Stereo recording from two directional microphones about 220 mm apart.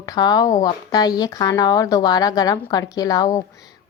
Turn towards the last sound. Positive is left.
turn(degrees=15)  # may be behind; listen again after turning